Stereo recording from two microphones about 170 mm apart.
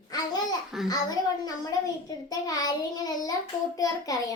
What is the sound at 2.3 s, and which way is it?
Child singing, 20° left (ahead or behind).